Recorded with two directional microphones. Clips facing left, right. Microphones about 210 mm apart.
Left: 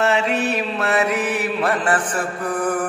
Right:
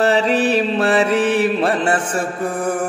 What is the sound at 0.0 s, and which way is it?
Mantra, 35° right (ahead or behind).